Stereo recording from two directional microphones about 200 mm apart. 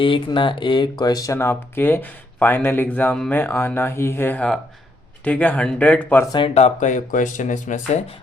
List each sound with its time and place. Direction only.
0.0 s speech: 25° left (ahead or behind); by 6.2 s 5° left (ahead or behind)
6.3 s speech: 30° left (ahead or behind)